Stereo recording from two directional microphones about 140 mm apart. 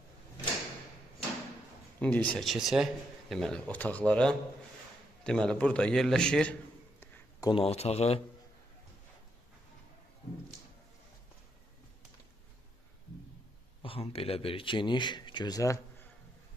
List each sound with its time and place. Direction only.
2.0 s speech: 10° left (ahead or behind)
7.3 s speech: 30° left (ahead or behind)
7.6 s speech: 45° left (ahead or behind)
13.8 s speech: 45° left (ahead or behind); by 15.8 s 25° left (ahead or behind)